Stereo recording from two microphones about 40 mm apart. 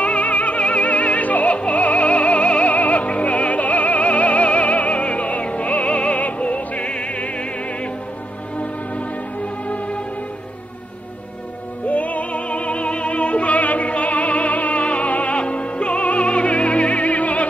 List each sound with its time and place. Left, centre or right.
0.0 s music: left
11.9 s music: left